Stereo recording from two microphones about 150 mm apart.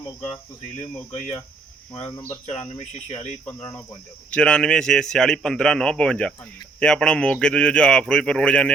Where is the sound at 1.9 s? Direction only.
30° left (ahead or behind).